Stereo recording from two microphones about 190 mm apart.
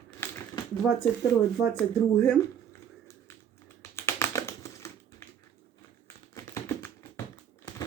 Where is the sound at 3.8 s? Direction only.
15° left (ahead or behind).